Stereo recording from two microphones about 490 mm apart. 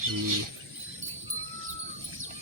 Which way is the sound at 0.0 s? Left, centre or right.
Right.